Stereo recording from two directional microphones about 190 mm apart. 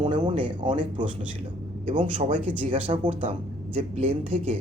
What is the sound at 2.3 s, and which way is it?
Speech, 30° right (ahead or behind).